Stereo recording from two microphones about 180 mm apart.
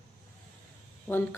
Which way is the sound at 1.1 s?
15° left (ahead or behind).